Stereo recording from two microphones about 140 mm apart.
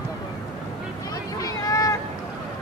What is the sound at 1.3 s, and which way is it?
Boat, 25° left (ahead or behind).